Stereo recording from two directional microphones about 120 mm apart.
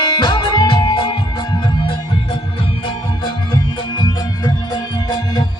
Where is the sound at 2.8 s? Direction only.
35° left (ahead or behind).